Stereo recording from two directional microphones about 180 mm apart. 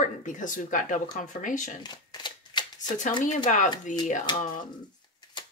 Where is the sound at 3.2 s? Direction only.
45° left (ahead or behind).